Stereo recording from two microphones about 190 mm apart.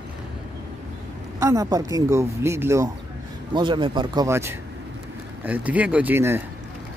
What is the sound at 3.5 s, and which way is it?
Speech, 25° right (ahead or behind).